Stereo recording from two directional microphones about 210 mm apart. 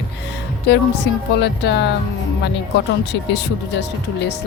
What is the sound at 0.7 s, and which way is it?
Speech, 50° left (ahead or behind).